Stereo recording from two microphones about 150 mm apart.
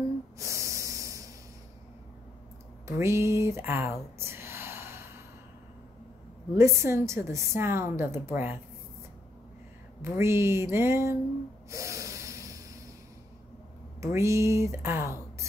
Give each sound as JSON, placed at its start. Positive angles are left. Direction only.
{"t": 0.4, "sound": "hiss", "side_deg": -20}
{"t": 3.0, "sound": "a woman's voice", "side_deg": -20}
{"t": 4.2, "sound": "gasp", "side_deg": -15}
{"t": 6.5, "sound": "a woman's voice", "side_deg": -20}
{"t": 10.0, "sound": "a woman's voice", "side_deg": -15}
{"t": 11.7, "sound": "snort", "side_deg": -20}
{"t": 14.1, "sound": "speech", "side_deg": -20}